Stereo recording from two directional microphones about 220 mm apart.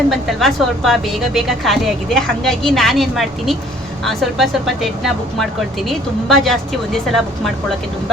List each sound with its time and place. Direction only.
0.1 s a woman's voice: centre (ahead or behind)